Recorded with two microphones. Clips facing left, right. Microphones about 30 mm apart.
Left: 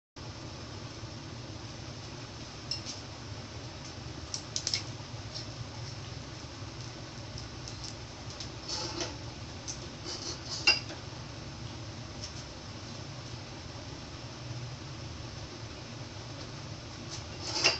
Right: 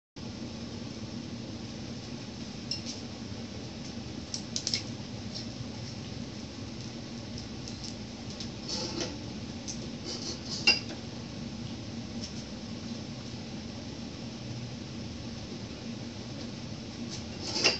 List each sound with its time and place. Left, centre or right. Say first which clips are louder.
8.7 s vehicle: right 2 dB; right
10.2 s cutlery: right 1 dB; right
17.5 s a sound: right 1 dB; right